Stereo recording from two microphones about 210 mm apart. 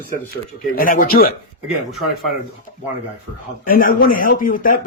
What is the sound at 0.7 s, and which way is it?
Speech, 40° left (ahead or behind).